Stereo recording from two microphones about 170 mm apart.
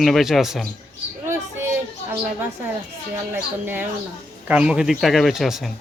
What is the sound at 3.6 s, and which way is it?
Speech, 10° right (ahead or behind).